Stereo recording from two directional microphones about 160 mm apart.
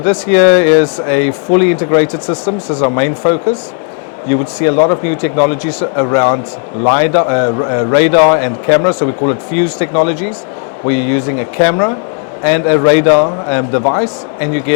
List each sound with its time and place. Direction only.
0.0 s speech: 15° left (ahead or behind)